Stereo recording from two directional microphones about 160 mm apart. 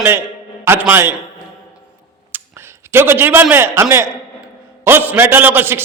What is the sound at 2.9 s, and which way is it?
A man's voice, 15° right (ahead or behind).